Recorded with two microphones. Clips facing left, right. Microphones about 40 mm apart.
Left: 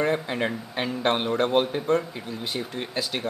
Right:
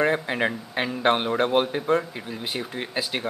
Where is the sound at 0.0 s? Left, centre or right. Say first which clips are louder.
Right 2 dB; centre.